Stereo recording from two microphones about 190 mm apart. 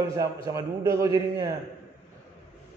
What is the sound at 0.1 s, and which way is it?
A man's voice, 15° right (ahead or behind).